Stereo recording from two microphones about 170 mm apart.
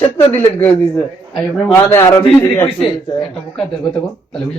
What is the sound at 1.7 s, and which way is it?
A man's voice, 15° left (ahead or behind).